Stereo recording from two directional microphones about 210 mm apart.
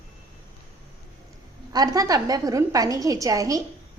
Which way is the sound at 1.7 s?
15° right (ahead or behind).